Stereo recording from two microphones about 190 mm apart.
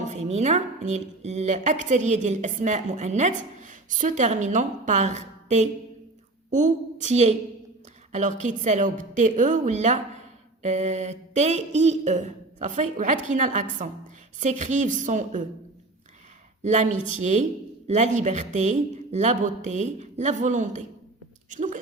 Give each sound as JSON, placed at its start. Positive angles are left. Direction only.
{"t": 0.1, "sound": "a woman's voice", "side_deg": -35}
{"t": 16.6, "sound": "a woman's voice", "side_deg": -40}